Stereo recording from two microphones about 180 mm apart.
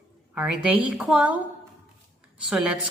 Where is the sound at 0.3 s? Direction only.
10° right (ahead or behind).